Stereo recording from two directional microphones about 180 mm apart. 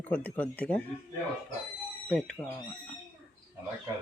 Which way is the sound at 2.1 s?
5° left (ahead or behind).